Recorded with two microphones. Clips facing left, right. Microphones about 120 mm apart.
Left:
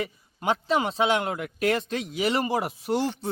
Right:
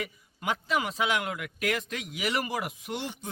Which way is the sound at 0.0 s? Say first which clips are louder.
Left 5 dB; 30° left (ahead or behind).